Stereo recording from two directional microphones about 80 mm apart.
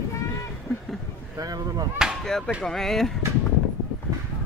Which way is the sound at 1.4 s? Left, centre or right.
Right.